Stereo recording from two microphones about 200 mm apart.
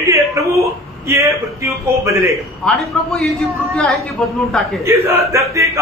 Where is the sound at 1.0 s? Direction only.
15° right (ahead or behind).